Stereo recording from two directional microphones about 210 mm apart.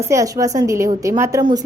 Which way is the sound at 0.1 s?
15° right (ahead or behind).